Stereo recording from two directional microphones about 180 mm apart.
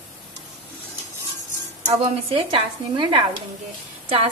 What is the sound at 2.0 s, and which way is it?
A woman's voice, 30° right (ahead or behind).